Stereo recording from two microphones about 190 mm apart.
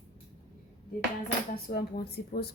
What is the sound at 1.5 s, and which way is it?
Speech, 55° left (ahead or behind).